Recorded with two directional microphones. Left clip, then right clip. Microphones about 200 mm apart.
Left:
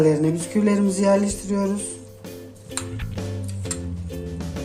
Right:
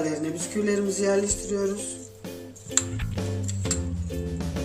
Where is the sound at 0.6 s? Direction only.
40° left (ahead or behind).